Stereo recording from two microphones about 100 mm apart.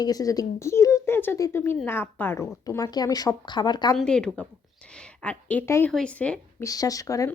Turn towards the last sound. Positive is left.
turn(degrees=35)  # may be behind; listen again after turning